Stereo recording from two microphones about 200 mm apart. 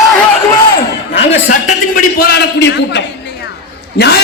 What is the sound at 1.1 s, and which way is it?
A man's voice, 40° left (ahead or behind).